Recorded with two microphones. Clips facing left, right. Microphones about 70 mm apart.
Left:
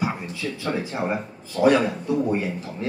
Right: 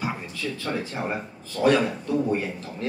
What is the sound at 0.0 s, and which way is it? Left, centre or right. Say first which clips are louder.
Speech: left 3 dB; centre.